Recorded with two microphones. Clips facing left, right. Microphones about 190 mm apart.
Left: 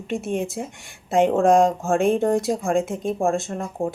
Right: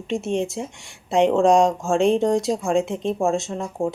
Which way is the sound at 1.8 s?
60° left (ahead or behind).